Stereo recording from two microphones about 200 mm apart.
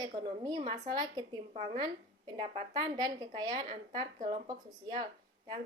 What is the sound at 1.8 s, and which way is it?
A woman's voice, 20° right (ahead or behind).